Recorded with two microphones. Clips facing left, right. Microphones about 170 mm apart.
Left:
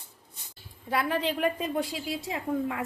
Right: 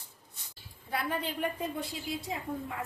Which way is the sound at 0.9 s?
90° left.